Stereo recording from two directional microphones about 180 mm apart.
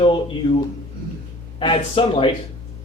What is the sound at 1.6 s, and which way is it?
Speech, 30° left (ahead or behind).